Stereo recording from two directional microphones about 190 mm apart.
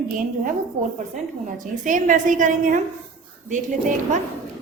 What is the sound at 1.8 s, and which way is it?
Speech, 40° right (ahead or behind).